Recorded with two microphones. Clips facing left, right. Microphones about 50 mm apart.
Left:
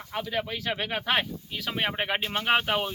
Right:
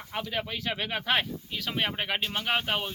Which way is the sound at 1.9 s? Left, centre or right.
Left.